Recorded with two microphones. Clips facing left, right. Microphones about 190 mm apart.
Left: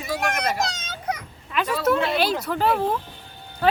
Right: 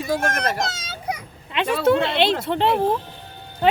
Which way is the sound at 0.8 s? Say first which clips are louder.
Even; 10° right (ahead or behind).